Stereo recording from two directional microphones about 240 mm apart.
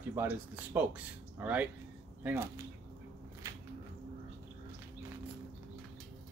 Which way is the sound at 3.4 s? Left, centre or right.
Centre.